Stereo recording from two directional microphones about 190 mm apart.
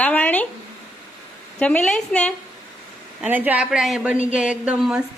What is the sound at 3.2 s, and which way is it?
Speech, 10° right (ahead or behind).